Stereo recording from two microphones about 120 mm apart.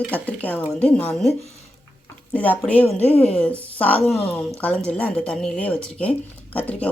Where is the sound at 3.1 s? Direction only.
55° left (ahead or behind).